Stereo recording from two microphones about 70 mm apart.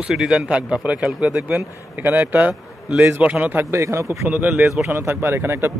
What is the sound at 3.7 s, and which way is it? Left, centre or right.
Speech, right.